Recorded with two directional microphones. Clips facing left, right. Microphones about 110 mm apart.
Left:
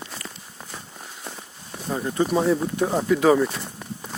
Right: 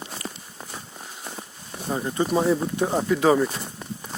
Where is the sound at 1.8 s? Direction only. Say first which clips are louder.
Left 1 dB; 5° right (ahead or behind).